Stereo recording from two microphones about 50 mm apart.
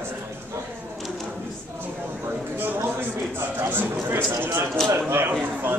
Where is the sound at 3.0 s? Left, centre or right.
Right.